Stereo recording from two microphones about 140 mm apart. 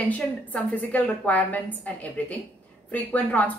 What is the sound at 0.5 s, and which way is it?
A woman's voice, 10° left (ahead or behind).